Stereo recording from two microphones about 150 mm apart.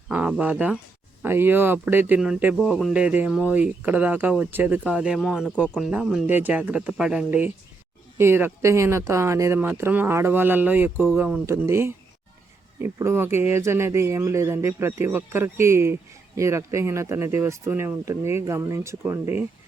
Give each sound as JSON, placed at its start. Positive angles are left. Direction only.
{"t": 0.1, "sound": "speech", "side_deg": -10}